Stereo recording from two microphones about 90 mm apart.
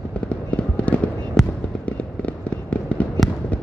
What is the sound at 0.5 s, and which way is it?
Fireworks, 15° left (ahead or behind).